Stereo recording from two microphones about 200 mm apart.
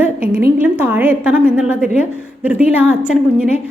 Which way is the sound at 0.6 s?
10° right (ahead or behind).